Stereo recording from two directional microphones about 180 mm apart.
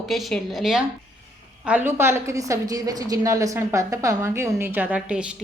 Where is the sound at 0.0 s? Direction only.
Centre (ahead or behind).